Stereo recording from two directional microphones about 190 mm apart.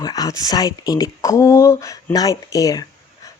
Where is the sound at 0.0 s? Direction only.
20° left (ahead or behind).